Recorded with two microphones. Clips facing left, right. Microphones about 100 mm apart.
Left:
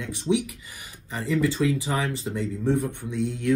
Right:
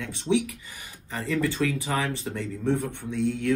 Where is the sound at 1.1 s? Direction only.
15° left (ahead or behind).